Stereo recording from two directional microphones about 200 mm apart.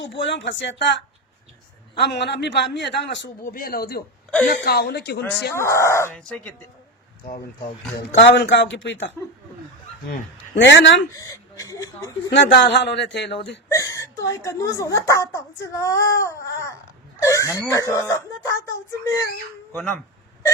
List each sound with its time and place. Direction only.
0.0 s a man's voice: 65° left (ahead or behind)
2.0 s a man's voice: 55° left (ahead or behind)
5.5 s speech: 15° left (ahead or behind)
8.2 s a man's voice: 65° left (ahead or behind)
11.1 s speech: 15° left (ahead or behind)
12.3 s a man's voice: 60° left (ahead or behind)
13.7 s speech: 15° left (ahead or behind)